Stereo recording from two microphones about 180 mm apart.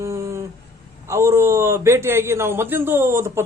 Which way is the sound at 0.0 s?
15° right (ahead or behind).